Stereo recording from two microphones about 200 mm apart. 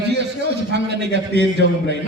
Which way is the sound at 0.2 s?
60° right (ahead or behind).